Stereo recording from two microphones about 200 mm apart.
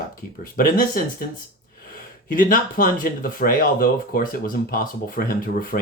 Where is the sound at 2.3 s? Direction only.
45° left (ahead or behind).